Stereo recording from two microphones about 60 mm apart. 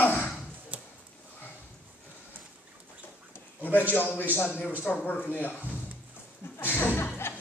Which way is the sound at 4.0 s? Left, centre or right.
Left.